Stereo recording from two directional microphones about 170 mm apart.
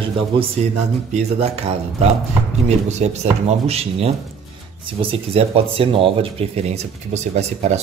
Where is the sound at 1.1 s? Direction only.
40° right (ahead or behind).